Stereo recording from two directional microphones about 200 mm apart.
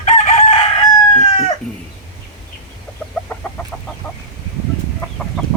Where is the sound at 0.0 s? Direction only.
35° left (ahead or behind).